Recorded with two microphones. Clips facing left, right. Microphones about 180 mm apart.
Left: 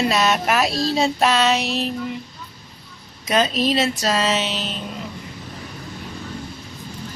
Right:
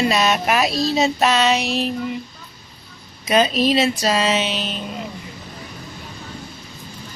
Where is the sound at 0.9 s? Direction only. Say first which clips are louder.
Even; 5° right (ahead or behind).